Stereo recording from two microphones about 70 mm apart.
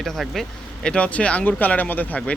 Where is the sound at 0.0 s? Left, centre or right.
Centre.